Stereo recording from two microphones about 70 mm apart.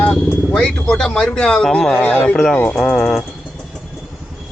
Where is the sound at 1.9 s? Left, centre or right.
Left.